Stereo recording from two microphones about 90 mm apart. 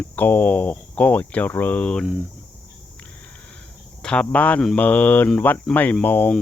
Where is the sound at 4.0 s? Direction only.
10° left (ahead or behind).